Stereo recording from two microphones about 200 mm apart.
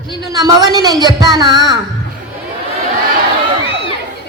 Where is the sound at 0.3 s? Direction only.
20° right (ahead or behind).